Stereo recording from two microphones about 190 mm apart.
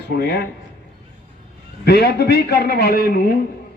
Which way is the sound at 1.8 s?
60° left (ahead or behind).